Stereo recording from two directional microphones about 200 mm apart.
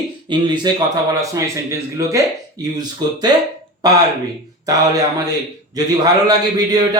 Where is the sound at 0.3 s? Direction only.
20° right (ahead or behind).